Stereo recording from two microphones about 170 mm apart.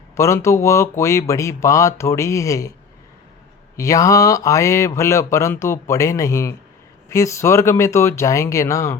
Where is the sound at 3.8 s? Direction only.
20° left (ahead or behind).